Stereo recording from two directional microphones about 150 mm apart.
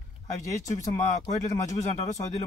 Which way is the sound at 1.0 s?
50° left (ahead or behind).